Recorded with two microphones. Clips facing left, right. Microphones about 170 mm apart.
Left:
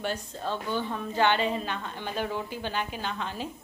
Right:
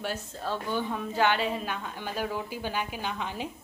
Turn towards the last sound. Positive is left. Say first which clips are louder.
# even
turn(degrees=-15)  # may be behind; listen again after turning